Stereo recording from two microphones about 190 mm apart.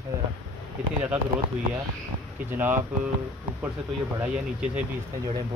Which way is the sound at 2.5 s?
10° right (ahead or behind).